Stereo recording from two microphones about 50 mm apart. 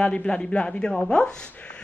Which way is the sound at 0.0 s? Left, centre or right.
Left.